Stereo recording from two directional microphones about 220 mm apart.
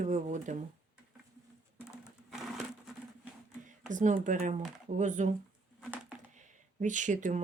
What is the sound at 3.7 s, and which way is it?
Speech, 35° right (ahead or behind).